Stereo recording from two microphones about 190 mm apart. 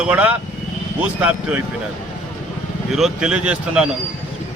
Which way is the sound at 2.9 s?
5° right (ahead or behind).